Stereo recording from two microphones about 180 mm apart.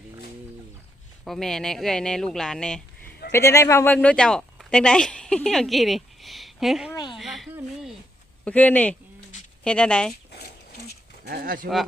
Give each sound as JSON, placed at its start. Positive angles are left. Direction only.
{"t": 1.2, "sound": "speech", "side_deg": 0}
{"t": 3.3, "sound": "speech", "side_deg": 15}
{"t": 6.9, "sound": "a sound", "side_deg": 25}
{"t": 7.2, "sound": "a sound", "side_deg": 0}
{"t": 8.4, "sound": "speech", "side_deg": 10}
{"t": 11.3, "sound": "speech", "side_deg": -55}